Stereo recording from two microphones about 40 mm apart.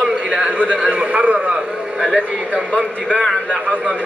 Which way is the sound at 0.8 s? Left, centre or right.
Right.